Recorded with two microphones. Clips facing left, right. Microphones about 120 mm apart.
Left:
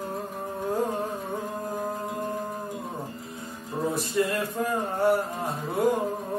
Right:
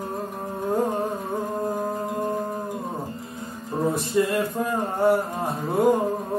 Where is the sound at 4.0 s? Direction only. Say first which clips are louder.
Right 3 dB; 25° right (ahead or behind).